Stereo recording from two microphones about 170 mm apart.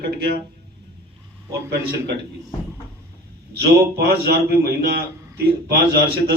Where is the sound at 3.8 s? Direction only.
65° right (ahead or behind).